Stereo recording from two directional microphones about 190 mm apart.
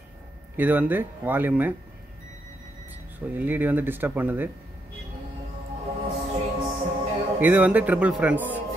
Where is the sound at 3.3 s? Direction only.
10° right (ahead or behind).